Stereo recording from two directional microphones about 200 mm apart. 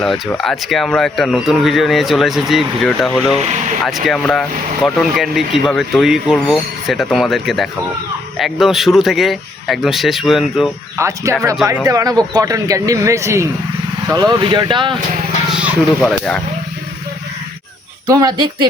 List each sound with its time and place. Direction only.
0.0 s speech: centre (ahead or behind)
3.4 s speech: 35° right (ahead or behind)
3.8 s speech: centre (ahead or behind)
10.9 s speech: 15° right (ahead or behind)
15.4 s speech: 5° right (ahead or behind)
18.1 s speech: 20° right (ahead or behind)